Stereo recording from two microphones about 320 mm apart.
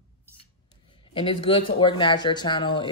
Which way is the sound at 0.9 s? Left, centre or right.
Centre.